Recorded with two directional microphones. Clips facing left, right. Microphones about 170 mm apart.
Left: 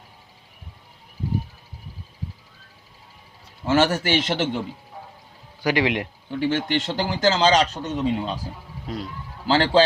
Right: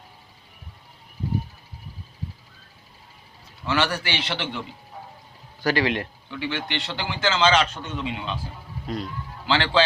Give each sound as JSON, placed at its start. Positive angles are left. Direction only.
{"t": 3.6, "sound": "a man's voice", "side_deg": 45}
{"t": 5.6, "sound": "speech", "side_deg": 20}
{"t": 6.3, "sound": "a man's voice", "side_deg": 45}
{"t": 9.5, "sound": "a man's voice", "side_deg": 40}